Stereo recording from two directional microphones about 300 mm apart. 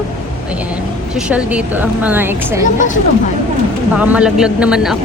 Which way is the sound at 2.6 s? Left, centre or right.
Left.